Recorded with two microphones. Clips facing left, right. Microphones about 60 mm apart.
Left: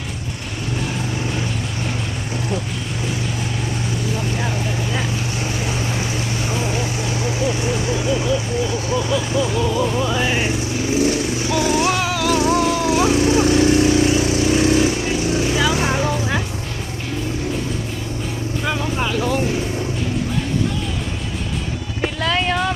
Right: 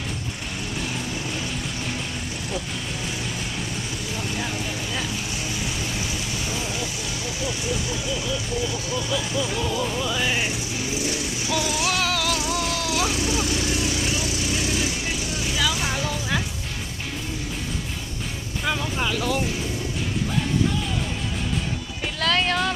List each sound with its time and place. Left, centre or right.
6.5 s vehicle: left
9.6 s music: centre
9.8 s music: centre
10.9 s vehicle: left
11.9 s music: centre
12.4 s lawn mower: left
15.5 s vehicle: left
18.6 s vehicle: centre
22.2 s a sound: centre